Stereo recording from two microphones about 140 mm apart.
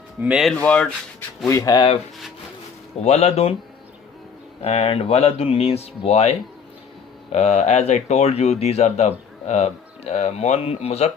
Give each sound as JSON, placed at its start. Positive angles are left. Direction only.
{"t": 0.2, "sound": "speech", "side_deg": -5}
{"t": 0.6, "sound": "speech", "side_deg": 10}
{"t": 1.5, "sound": "speech", "side_deg": 25}
{"t": 3.0, "sound": "speech", "side_deg": 50}
{"t": 4.6, "sound": "speech", "side_deg": 45}
{"t": 7.3, "sound": "speech", "side_deg": 50}